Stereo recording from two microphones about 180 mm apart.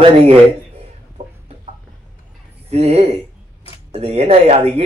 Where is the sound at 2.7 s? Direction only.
35° right (ahead or behind).